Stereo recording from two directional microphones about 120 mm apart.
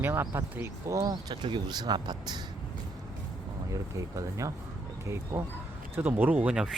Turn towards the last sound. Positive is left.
turn(degrees=-5)  # may be behind; listen again after turning